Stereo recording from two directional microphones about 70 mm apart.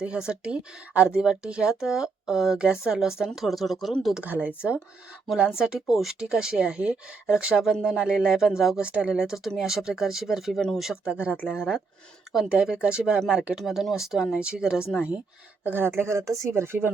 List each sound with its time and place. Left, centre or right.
0.0 s a woman's voice: centre
4.2 s speech: centre
5.3 s a woman's voice: centre
10.8 s a woman's voice: centre
12.5 s a woman's voice: centre
15.6 s speech: right
16.0 s speech: right